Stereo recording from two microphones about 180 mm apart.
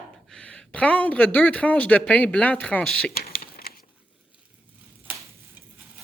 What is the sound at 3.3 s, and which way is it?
Crumpling, 55° left (ahead or behind).